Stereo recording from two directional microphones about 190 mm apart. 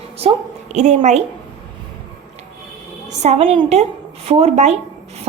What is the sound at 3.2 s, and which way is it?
A woman's voice, 30° right (ahead or behind).